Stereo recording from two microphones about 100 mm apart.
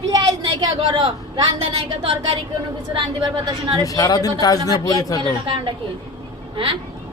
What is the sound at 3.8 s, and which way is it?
A woman's voice, 35° left (ahead or behind).